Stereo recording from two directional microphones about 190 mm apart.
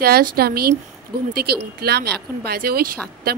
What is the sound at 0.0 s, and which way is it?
A woman's voice, 55° right (ahead or behind).